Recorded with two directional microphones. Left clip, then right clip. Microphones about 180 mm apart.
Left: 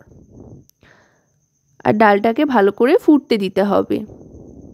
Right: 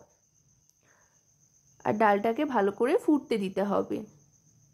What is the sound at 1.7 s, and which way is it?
A woman's voice, 45° left (ahead or behind).